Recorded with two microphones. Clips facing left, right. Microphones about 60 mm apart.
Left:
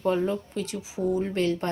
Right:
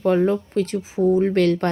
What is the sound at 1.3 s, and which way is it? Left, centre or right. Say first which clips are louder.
Speech: right 8 dB; right.